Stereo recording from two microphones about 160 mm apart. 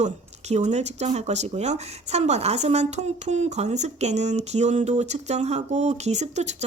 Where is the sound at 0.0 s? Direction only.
45° right (ahead or behind).